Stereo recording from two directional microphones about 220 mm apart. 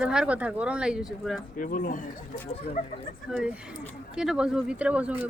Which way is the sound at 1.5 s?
35° left (ahead or behind).